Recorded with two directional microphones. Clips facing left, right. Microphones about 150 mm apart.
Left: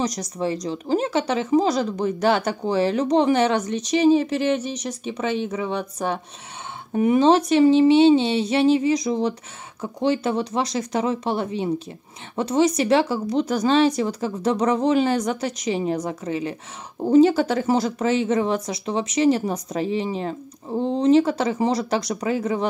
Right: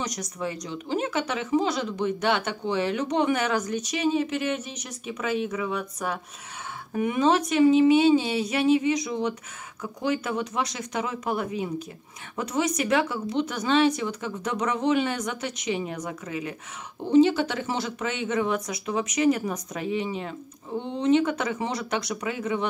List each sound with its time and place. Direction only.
0.0 s speech: 35° left (ahead or behind)